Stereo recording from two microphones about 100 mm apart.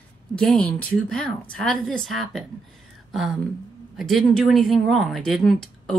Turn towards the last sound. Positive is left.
turn(degrees=5)  # may be behind; listen again after turning